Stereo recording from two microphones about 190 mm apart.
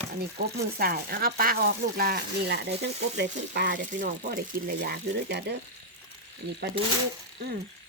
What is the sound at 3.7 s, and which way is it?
Speech, 45° right (ahead or behind).